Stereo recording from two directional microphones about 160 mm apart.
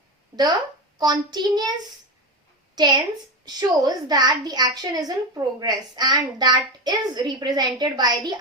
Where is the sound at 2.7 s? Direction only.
25° right (ahead or behind).